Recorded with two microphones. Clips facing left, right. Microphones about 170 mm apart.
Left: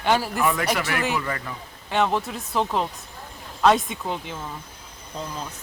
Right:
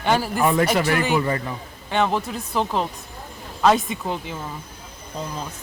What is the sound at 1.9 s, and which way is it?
Speech, centre (ahead or behind).